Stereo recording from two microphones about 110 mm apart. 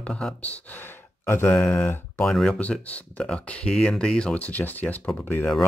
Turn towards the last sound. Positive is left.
turn(degrees=15)  # may be behind; listen again after turning